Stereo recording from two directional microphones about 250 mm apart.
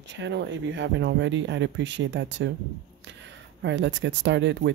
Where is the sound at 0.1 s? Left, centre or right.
Right.